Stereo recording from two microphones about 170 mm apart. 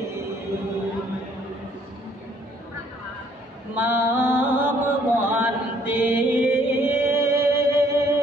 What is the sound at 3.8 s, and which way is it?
Chant, 10° right (ahead or behind).